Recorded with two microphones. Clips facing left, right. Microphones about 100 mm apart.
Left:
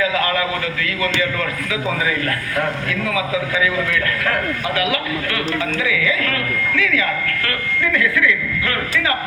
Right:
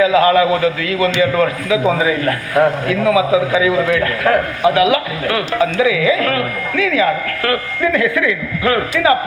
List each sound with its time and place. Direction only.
0.0 s a man's voice: 25° right (ahead or behind)